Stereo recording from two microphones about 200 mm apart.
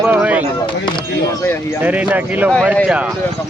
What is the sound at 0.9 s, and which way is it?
Speech, 15° left (ahead or behind).